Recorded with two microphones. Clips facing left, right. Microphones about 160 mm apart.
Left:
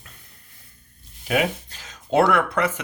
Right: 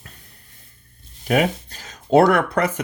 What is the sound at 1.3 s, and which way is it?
Speech, 40° right (ahead or behind).